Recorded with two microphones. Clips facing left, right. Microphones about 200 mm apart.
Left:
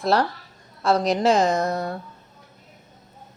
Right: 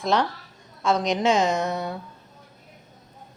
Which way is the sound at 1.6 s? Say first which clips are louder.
Left 2 dB; centre (ahead or behind).